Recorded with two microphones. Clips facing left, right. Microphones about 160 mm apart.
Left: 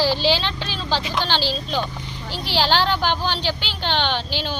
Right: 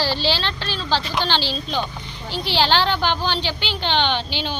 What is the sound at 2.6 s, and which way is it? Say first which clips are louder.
A woman's voice: even; 5° left (ahead or behind).